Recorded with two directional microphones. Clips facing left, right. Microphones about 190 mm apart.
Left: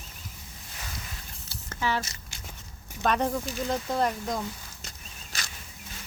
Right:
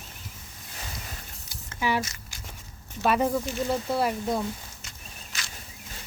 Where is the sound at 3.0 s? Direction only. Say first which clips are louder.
Right 2 dB; 5° right (ahead or behind).